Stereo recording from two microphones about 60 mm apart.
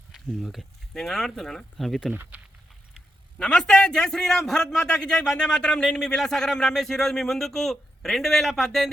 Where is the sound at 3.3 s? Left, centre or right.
Centre.